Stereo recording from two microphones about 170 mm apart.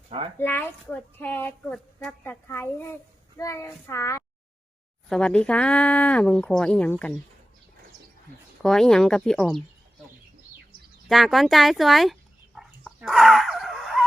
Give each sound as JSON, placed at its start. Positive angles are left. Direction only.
{"t": 0.3, "sound": "speech", "side_deg": 10}
{"t": 5.0, "sound": "speech", "side_deg": 5}
{"t": 8.6, "sound": "speech", "side_deg": 5}
{"t": 11.1, "sound": "speech", "side_deg": 0}
{"t": 12.5, "sound": "dog", "side_deg": -5}